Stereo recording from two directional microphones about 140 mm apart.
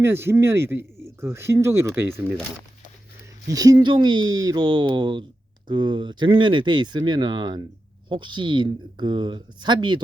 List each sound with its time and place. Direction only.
0.0 s speech: 15° right (ahead or behind)
3.5 s speech: 25° right (ahead or behind)